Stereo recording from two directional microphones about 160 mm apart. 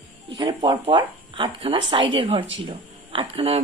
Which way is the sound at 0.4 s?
30° right (ahead or behind).